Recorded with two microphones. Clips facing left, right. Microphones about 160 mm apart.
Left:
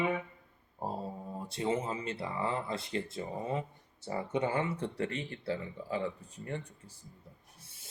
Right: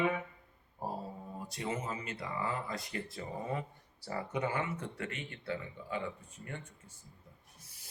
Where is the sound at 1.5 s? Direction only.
30° left (ahead or behind).